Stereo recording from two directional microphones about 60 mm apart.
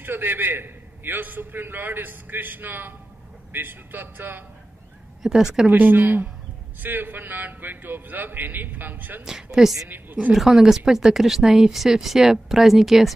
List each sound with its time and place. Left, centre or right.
0.0 s a man's voice: right
5.2 s a woman's voice: centre
5.7 s a man's voice: right
9.2 s a woman's voice: centre
9.8 s a sound: right
10.3 s a woman's voice: centre